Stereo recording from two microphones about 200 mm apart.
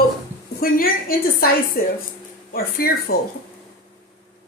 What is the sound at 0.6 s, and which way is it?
Speech, 45° left (ahead or behind).